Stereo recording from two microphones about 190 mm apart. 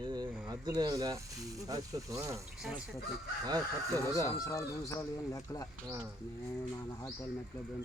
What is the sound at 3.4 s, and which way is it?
Speech, 20° right (ahead or behind).